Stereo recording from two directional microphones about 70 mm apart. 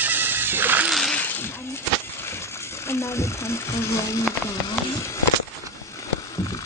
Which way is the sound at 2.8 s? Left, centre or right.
Left.